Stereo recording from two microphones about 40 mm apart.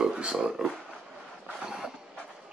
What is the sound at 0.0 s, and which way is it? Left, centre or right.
Speech, centre.